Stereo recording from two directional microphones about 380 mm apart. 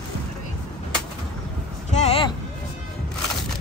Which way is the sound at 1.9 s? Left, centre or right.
Centre.